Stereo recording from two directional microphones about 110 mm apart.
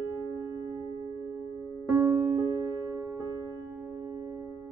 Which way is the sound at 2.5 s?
30° right (ahead or behind).